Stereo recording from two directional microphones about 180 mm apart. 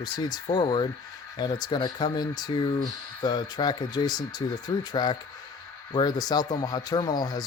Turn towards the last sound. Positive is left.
turn(degrees=20)  # may be behind; listen again after turning